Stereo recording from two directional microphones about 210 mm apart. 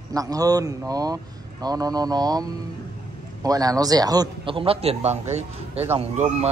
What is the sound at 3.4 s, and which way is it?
Speech, 15° right (ahead or behind).